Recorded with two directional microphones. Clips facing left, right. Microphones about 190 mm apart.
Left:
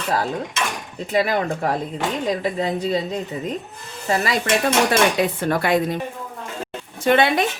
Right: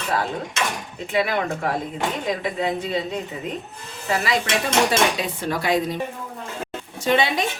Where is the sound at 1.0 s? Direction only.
40° left (ahead or behind).